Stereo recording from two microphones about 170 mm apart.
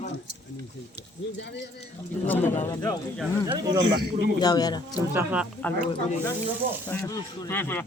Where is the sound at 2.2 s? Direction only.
10° left (ahead or behind).